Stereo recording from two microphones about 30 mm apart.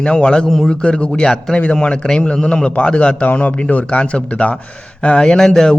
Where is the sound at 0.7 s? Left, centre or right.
Left.